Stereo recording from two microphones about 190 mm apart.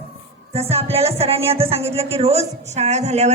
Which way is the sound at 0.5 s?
30° right (ahead or behind).